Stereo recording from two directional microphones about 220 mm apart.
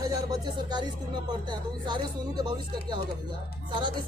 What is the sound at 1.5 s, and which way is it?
Speech, 20° right (ahead or behind).